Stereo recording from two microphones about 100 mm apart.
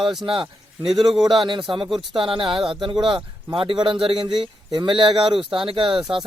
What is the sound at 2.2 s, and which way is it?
Speech, 60° right (ahead or behind).